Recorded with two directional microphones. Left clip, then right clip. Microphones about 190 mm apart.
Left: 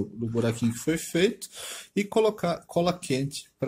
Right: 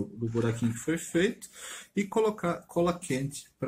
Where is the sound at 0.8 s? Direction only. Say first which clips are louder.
Left 3 dB; 45° left (ahead or behind).